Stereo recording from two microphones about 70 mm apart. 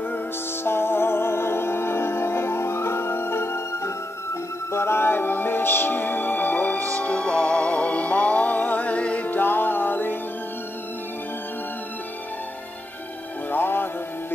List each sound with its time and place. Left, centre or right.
0.7 s music: left
13.5 s music: left